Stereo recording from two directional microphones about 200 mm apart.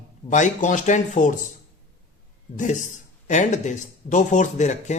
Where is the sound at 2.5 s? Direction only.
40° left (ahead or behind).